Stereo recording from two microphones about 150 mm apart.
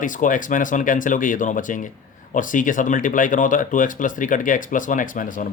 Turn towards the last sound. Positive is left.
turn(degrees=65)  # may be behind; listen again after turning